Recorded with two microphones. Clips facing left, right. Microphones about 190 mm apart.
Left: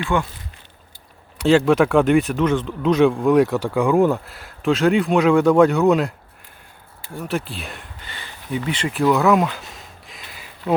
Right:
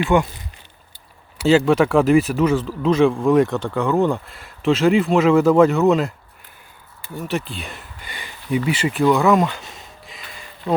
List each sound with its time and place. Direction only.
0.0 s speech: 15° right (ahead or behind)
1.4 s speech: centre (ahead or behind)
8.0 s a sound: 15° right (ahead or behind); by 10.8 s 5° left (ahead or behind)